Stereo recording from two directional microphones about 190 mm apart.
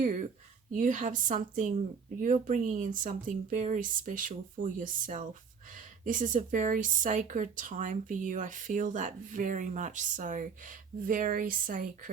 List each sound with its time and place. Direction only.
0.0 s speech: 45° right (ahead or behind)